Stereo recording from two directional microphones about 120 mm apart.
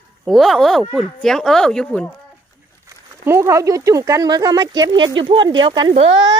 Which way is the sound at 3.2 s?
20° right (ahead or behind).